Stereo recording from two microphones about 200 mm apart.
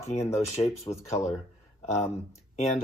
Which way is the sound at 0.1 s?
30° left (ahead or behind).